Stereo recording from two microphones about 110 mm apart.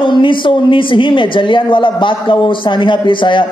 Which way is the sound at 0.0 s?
50° left (ahead or behind).